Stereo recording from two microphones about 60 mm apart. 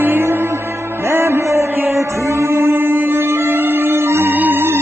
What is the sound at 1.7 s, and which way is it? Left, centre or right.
Music, right.